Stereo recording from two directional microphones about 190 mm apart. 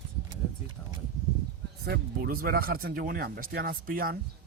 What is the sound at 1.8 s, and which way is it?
Speech, 55° right (ahead or behind).